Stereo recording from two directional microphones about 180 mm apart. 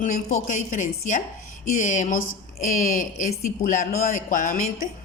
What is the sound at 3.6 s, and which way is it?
A woman's voice, 50° left (ahead or behind).